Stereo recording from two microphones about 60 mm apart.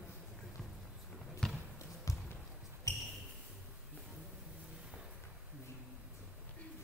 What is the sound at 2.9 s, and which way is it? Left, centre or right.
Basketball bounce, left.